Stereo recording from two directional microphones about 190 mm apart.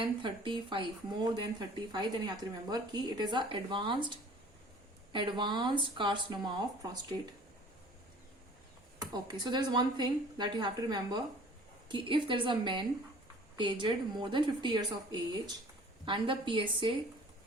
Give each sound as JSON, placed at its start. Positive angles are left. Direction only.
{"t": 0.0, "sound": "speech", "side_deg": -25}
{"t": 9.0, "sound": "speech", "side_deg": -20}
{"t": 16.0, "sound": "speech", "side_deg": -25}